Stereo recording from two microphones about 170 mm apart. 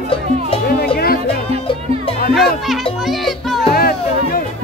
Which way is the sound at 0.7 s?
65° left (ahead or behind).